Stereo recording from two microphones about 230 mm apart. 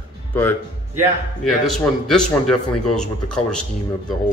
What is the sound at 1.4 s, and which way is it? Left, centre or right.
A man's voice, centre.